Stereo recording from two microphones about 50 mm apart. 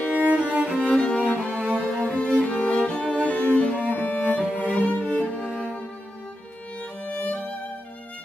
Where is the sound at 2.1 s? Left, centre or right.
Left.